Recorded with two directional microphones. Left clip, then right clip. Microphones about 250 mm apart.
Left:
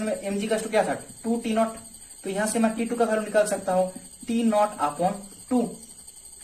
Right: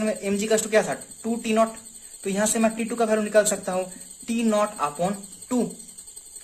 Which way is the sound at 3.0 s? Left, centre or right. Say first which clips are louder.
Right 2 dB; right.